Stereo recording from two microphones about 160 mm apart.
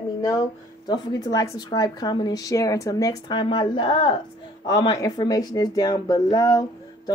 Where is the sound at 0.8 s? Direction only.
25° left (ahead or behind).